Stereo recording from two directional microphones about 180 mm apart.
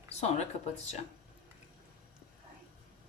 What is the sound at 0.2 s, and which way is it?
Speech, 35° left (ahead or behind).